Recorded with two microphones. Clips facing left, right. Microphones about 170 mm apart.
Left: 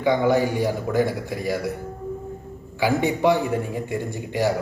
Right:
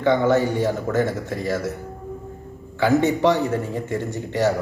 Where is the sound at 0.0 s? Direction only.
10° left (ahead or behind).